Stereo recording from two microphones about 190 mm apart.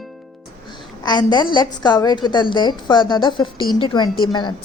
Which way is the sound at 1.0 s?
20° left (ahead or behind).